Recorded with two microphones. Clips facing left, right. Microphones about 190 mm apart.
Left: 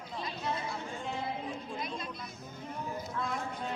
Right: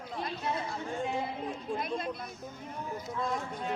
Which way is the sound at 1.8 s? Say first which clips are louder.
Right 5 dB; 55° right (ahead or behind).